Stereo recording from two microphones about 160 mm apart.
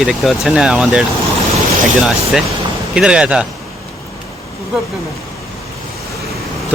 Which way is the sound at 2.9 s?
5° right (ahead or behind).